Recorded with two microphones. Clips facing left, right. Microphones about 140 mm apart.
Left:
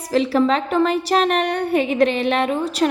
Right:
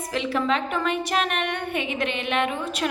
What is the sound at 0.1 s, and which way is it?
A woman's voice, 35° left (ahead or behind).